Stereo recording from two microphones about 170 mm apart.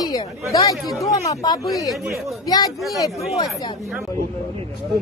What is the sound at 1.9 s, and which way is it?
Speech, centre (ahead or behind).